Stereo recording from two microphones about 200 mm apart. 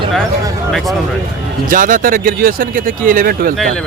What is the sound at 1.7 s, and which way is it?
Speech, 40° right (ahead or behind).